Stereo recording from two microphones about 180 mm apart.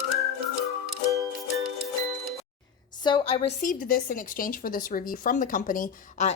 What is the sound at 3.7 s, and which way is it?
Speech, 50° left (ahead or behind).